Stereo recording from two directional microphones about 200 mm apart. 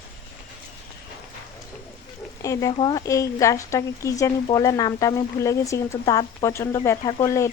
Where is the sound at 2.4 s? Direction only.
15° left (ahead or behind).